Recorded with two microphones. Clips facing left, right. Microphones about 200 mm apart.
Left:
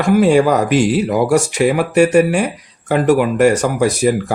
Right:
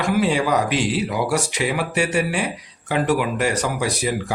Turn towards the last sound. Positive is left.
turn(degrees=50)  # may be behind; listen again after turning